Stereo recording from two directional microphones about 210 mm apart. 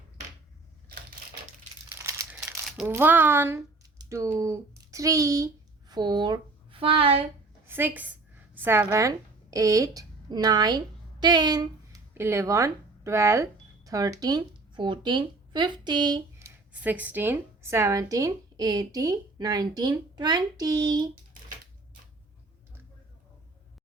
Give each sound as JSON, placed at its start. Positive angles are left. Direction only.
{"t": 1.9, "sound": "crumpling", "side_deg": -15}
{"t": 2.6, "sound": "a sound", "side_deg": 0}
{"t": 2.9, "sound": "speech", "side_deg": -10}
{"t": 7.7, "sound": "a woman's voice", "side_deg": -10}
{"t": 16.8, "sound": "speech", "side_deg": -10}